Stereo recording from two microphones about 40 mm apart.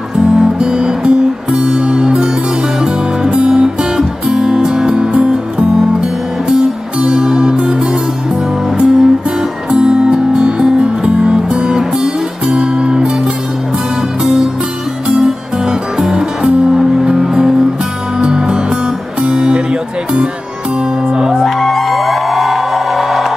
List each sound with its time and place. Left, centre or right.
0.2 s music: right
15.1 s music: right
21.4 s music: centre